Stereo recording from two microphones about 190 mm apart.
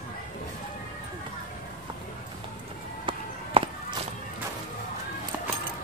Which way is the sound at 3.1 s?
25° right (ahead or behind).